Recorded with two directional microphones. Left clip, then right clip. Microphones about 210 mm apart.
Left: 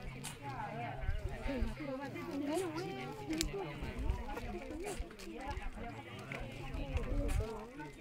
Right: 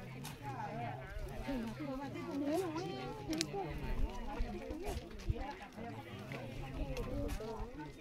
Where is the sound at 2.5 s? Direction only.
55° left (ahead or behind).